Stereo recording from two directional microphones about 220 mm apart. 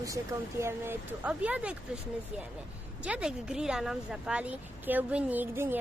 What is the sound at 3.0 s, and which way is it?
Speech, 5° right (ahead or behind).